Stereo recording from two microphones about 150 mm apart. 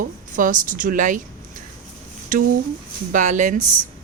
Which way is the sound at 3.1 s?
55° right (ahead or behind).